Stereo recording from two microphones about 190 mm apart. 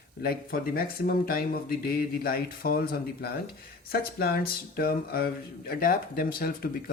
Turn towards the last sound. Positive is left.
turn(degrees=50)  # may be behind; listen again after turning